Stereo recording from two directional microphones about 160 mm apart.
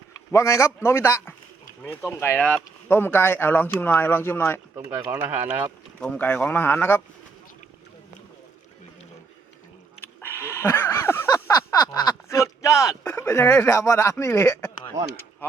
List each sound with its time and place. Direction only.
0.3 s speech: 20° left (ahead or behind)
4.8 s speech: 10° right (ahead or behind)
6.0 s speech: 10° left (ahead or behind)
10.0 s a sound: 15° left (ahead or behind)
13.1 s speech: 15° left (ahead or behind)